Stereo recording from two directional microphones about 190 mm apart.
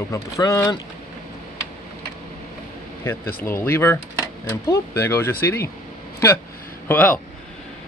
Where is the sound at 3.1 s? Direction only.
15° left (ahead or behind).